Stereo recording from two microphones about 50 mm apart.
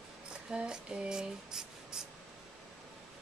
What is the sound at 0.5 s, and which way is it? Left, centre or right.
Speech, centre.